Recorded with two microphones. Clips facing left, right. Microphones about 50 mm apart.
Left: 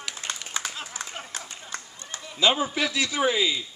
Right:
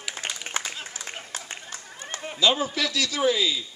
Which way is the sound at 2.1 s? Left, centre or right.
Right.